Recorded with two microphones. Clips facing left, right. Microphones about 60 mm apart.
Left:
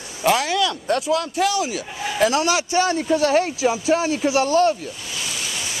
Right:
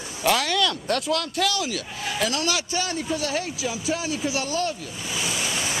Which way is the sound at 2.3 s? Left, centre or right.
Left.